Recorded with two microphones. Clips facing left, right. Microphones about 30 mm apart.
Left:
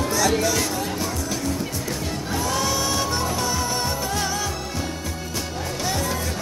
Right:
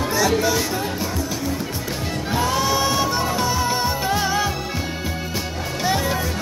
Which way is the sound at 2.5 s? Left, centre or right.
Centre.